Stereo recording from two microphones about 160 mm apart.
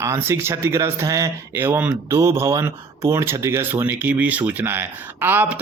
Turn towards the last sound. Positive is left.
turn(degrees=-10)  # may be behind; listen again after turning